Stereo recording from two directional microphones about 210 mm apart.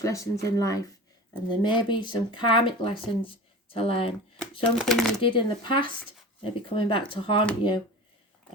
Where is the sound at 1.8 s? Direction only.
20° left (ahead or behind).